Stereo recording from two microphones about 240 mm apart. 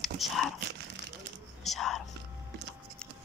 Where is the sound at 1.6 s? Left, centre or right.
Centre.